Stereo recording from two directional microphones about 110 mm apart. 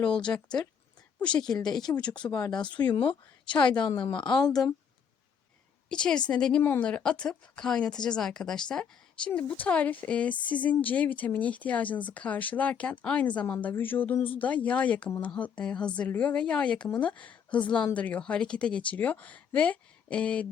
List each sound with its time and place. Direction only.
0.3 s speech: 25° left (ahead or behind)
1.9 s speech: 25° left (ahead or behind)
2.6 s speech: 45° left (ahead or behind)
5.9 s speech: 10° left (ahead or behind)